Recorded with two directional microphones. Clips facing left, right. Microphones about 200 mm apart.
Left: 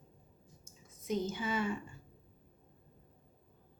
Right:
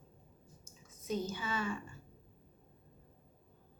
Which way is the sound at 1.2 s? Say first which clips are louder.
Left 3 dB; 20° left (ahead or behind).